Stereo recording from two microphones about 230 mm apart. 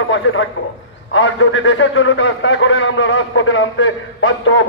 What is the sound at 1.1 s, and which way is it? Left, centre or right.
A man's voice, left.